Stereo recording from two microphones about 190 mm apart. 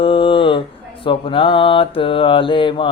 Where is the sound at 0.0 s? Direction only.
30° left (ahead or behind).